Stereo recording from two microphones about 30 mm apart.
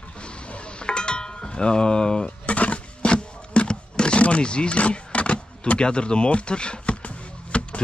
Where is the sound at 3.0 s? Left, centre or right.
Left.